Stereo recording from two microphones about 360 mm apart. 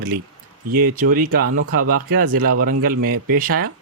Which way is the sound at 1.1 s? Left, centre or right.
Right.